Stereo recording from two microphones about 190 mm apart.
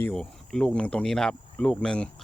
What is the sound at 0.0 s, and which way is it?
Speech, 5° left (ahead or behind).